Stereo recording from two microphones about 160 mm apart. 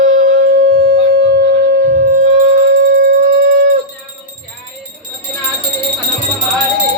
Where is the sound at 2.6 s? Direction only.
65° right (ahead or behind).